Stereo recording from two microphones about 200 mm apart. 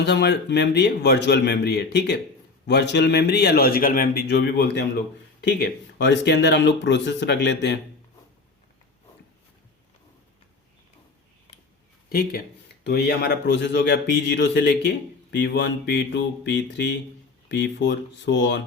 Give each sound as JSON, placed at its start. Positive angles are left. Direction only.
{"t": 0.0, "sound": "a man's voice", "side_deg": 60}
{"t": 12.0, "sound": "speech", "side_deg": 50}